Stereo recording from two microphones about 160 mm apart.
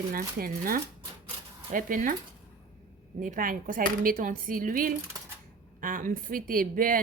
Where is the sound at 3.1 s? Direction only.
55° right (ahead or behind).